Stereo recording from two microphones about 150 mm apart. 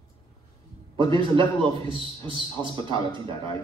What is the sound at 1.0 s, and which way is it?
A man's voice, 35° right (ahead or behind).